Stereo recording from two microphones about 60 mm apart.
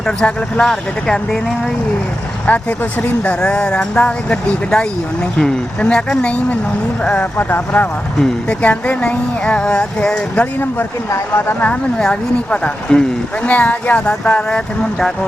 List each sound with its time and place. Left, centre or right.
0.0 s speech: centre
2.5 s speech: left
7.3 s speech: left
8.4 s speech: left
10.4 s speech: left
11.6 s speech: centre